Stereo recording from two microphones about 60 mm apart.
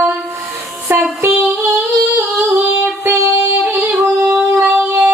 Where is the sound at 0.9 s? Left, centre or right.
Right.